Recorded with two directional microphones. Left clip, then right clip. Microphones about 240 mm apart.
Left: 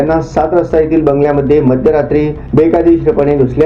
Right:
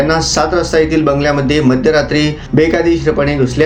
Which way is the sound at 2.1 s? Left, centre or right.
Right.